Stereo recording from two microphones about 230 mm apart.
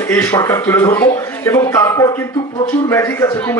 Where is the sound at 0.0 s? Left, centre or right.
Centre.